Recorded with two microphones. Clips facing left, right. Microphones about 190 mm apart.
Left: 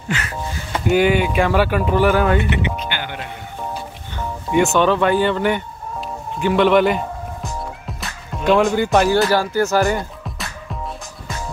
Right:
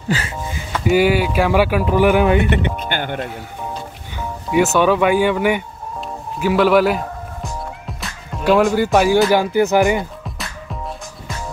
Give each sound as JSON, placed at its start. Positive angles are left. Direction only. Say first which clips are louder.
{"t": 0.1, "sound": "speech", "louder": "right 3 dB", "side_deg": -30}
{"t": 0.8, "sound": "speech", "louder": "right 1 dB", "side_deg": -5}
{"t": 2.5, "sound": "speech", "louder": "right 3 dB", "side_deg": -50}
{"t": 4.5, "sound": "speech", "louder": "right 1 dB", "side_deg": -5}